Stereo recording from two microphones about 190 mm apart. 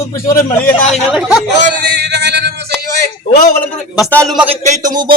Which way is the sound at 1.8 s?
60° right (ahead or behind).